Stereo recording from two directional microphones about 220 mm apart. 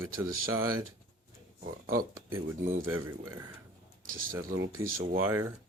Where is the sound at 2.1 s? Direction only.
10° right (ahead or behind).